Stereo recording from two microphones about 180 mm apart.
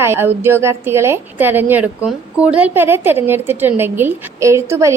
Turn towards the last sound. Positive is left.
turn(degrees=-15)  # may be behind; listen again after turning